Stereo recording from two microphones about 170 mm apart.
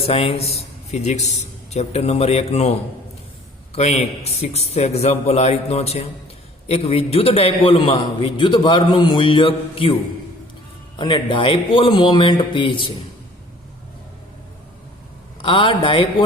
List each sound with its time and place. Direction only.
0.0 s a man's voice: 35° left (ahead or behind)
3.8 s a man's voice: 40° left (ahead or behind)
10.9 s a man's voice: 30° left (ahead or behind)
15.4 s a man's voice: 30° left (ahead or behind)